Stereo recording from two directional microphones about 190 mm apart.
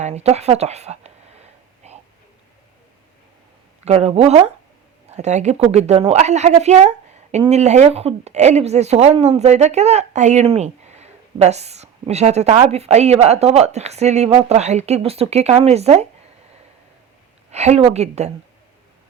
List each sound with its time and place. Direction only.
0.0 s a sound: 35° right (ahead or behind)
3.8 s a woman's voice: 35° right (ahead or behind)
17.5 s a woman's voice: 35° right (ahead or behind)